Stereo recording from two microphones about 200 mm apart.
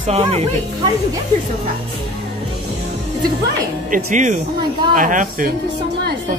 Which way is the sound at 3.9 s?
40° right (ahead or behind).